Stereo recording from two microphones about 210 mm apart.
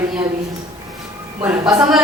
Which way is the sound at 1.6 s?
20° right (ahead or behind).